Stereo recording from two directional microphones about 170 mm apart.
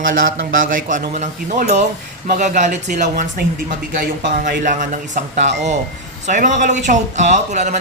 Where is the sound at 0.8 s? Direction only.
45° right (ahead or behind).